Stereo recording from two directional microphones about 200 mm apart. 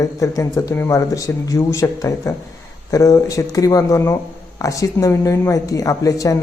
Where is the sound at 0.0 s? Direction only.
15° left (ahead or behind).